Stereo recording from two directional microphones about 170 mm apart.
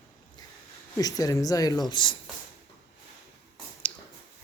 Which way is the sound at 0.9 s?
20° left (ahead or behind).